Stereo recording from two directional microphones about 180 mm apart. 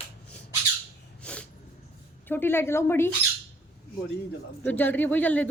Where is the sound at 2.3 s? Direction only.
10° left (ahead or behind).